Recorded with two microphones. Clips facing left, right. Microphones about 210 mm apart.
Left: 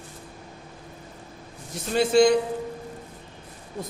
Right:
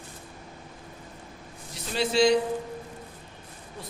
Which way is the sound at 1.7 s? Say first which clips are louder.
Left 5 dB; 50° left (ahead or behind).